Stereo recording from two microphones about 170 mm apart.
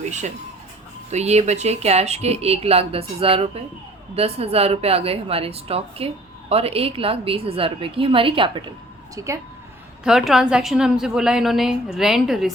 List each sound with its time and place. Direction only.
0.0 s speech: 45° right (ahead or behind)
9.1 s speech: 15° right (ahead or behind)
10.0 s a woman's voice: 5° right (ahead or behind)